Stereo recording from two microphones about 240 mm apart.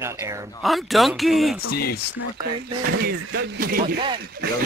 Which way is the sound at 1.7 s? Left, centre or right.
Left.